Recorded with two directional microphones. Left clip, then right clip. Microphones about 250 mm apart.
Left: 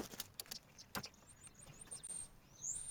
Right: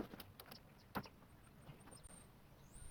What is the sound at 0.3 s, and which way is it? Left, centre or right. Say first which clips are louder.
Vehicle: left 7 dB; centre.